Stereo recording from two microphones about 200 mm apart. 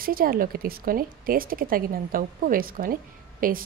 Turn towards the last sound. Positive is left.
turn(degrees=-45)  # may be behind; listen again after turning